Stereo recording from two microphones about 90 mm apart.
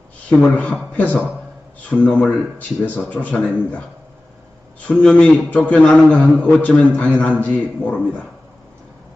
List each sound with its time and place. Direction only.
0.3 s a man's voice: 15° left (ahead or behind)
4.9 s a man's voice: 15° left (ahead or behind)